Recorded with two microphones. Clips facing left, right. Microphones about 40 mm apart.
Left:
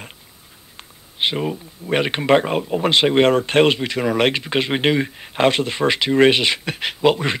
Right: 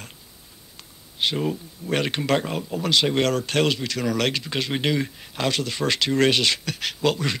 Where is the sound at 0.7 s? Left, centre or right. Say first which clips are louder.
Left 3 dB; left.